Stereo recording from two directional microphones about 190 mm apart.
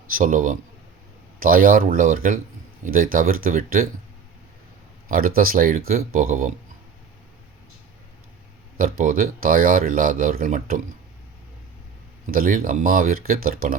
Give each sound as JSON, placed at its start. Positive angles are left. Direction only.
{"t": 0.1, "sound": "speech", "side_deg": -45}
{"t": 5.0, "sound": "speech", "side_deg": -50}
{"t": 8.8, "sound": "speech", "side_deg": -45}
{"t": 12.2, "sound": "speech", "side_deg": -45}